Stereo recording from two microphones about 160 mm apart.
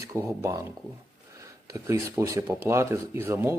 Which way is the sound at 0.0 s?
20° right (ahead or behind).